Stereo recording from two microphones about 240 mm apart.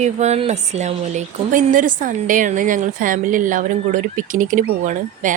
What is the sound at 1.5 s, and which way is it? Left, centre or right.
A woman's voice, right.